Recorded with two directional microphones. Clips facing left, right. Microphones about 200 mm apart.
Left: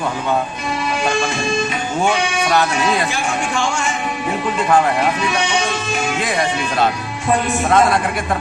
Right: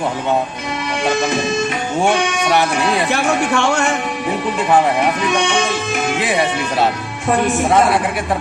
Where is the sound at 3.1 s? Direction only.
65° right (ahead or behind).